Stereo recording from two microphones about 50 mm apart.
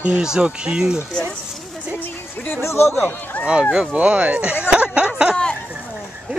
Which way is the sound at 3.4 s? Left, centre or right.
Centre.